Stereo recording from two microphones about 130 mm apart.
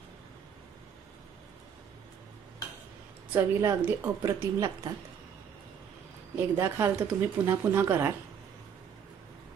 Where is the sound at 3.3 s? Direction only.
25° right (ahead or behind).